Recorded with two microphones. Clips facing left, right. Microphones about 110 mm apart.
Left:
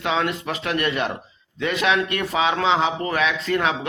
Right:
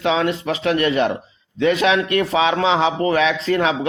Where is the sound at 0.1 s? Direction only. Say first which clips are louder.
Right 3 dB; 40° right (ahead or behind).